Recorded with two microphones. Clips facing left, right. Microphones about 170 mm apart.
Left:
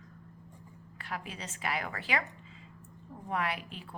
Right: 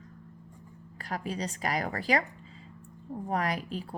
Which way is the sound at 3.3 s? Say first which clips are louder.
Right 3 dB; 40° right (ahead or behind).